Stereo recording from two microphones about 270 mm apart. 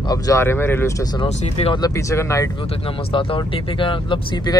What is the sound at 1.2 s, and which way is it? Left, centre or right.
Speech, left.